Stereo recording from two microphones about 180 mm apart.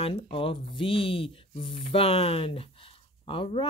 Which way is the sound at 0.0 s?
30° left (ahead or behind).